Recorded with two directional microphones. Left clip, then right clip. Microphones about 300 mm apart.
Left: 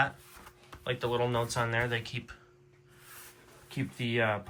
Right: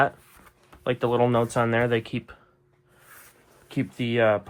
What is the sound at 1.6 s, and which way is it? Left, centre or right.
Speech, right.